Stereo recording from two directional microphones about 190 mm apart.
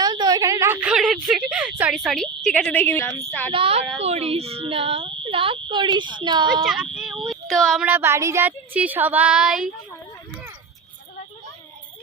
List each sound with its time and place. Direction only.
0.0 s a sound: 20° right (ahead or behind); by 3.5 s 10° left (ahead or behind)
3.5 s speech: 30° right (ahead or behind)
6.7 s speech: centre (ahead or behind)